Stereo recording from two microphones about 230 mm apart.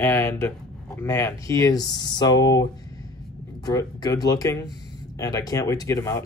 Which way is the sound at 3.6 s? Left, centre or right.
Centre.